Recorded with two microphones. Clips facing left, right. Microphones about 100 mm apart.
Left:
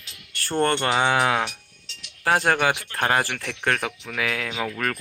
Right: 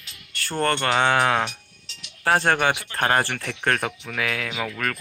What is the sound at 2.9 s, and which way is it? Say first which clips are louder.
Speech: right 1 dB; centre (ahead or behind).